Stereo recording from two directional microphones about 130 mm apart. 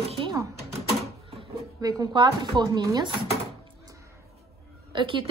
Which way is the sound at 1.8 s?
30° right (ahead or behind).